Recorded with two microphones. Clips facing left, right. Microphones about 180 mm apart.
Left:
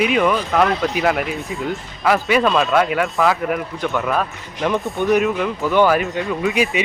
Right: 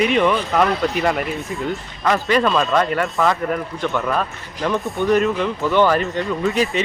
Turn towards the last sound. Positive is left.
turn(degrees=10)  # may be behind; listen again after turning